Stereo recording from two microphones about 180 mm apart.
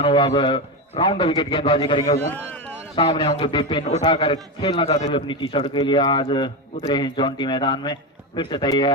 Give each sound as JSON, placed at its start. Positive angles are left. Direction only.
{"t": 0.0, "sound": "a man's voice", "side_deg": 30}